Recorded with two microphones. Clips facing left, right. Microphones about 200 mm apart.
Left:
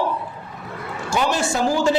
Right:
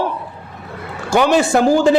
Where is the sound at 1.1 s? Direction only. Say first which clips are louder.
Right 8 dB; 65° right (ahead or behind).